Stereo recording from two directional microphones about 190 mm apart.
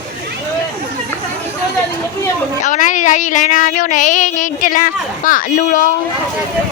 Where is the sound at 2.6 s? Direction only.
40° left (ahead or behind).